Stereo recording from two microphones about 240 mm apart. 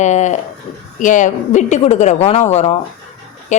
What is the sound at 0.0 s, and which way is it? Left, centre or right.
A woman's voice, left.